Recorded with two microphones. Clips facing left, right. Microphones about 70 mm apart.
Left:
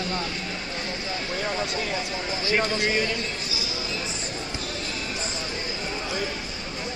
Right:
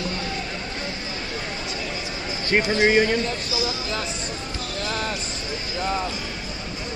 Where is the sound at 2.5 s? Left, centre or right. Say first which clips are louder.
Right 5 dB; right.